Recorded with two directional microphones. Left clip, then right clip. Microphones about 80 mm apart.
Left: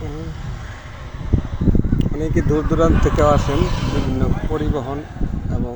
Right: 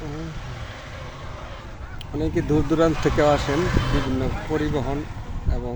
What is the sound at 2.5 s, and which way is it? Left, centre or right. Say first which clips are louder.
Speech: left 2 dB; right.